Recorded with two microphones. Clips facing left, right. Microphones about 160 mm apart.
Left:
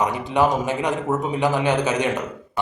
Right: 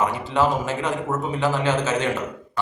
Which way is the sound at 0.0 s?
15° left (ahead or behind).